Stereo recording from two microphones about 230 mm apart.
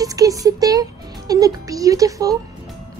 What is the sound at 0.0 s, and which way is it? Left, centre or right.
Music, centre.